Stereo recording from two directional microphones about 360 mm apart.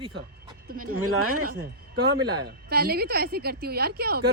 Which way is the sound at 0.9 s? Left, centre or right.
Right.